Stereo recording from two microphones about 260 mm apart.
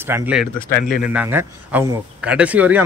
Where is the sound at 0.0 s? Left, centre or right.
Centre.